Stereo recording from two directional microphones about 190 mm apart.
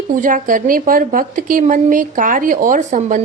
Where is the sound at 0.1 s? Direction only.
45° right (ahead or behind).